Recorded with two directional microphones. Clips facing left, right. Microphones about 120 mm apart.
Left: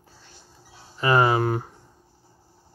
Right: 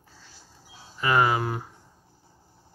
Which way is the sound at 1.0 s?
35° left (ahead or behind).